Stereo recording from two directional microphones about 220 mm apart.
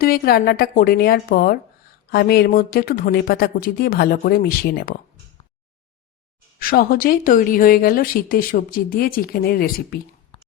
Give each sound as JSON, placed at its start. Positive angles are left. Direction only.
{"t": 0.0, "sound": "a woman's voice", "side_deg": 45}
{"t": 6.6, "sound": "speech", "side_deg": 40}
{"t": 10.3, "sound": "drip", "side_deg": 25}